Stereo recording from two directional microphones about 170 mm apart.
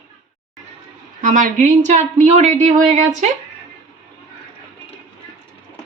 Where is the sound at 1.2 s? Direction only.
50° right (ahead or behind).